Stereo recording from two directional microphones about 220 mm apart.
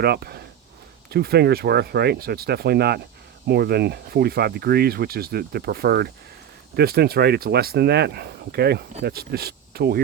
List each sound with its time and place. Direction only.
0.0 s speech: 45° right (ahead or behind)